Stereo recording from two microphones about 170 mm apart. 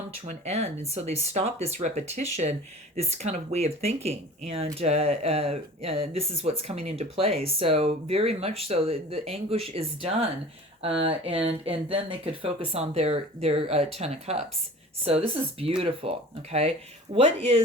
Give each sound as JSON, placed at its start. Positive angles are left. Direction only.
{"t": 0.3, "sound": "speech", "side_deg": -40}